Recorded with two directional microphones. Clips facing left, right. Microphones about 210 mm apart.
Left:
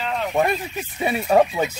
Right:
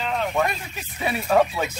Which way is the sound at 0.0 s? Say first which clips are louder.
Even; centre (ahead or behind).